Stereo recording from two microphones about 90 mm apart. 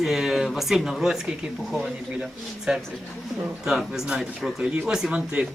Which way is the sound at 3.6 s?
5° right (ahead or behind).